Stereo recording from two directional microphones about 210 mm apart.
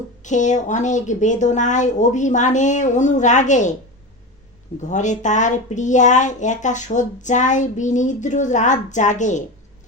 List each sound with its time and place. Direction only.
0.2 s speech: 35° left (ahead or behind)
4.8 s speech: 35° left (ahead or behind)